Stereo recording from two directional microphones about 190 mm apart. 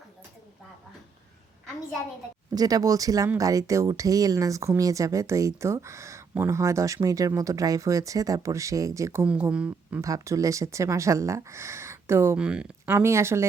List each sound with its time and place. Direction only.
2.6 s speech: 20° right (ahead or behind)